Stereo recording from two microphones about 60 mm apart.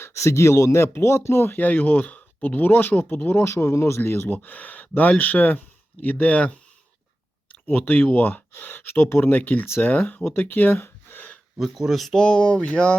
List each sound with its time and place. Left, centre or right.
0.0 s speech: left
3.4 s speech: left
4.3 s speech: left
7.7 s speech: left
9.6 s speech: left
9.9 s speech: left
11.5 s speech: centre
12.2 s speech: centre